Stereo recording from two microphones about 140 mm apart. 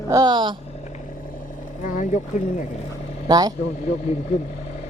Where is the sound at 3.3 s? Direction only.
25° right (ahead or behind).